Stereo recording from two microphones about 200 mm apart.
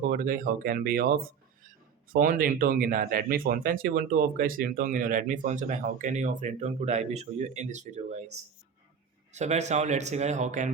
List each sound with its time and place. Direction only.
0.1 s speech: 45° right (ahead or behind)
9.3 s speech: 35° right (ahead or behind)